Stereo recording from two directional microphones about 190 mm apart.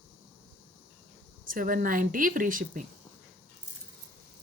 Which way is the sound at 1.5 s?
45° right (ahead or behind).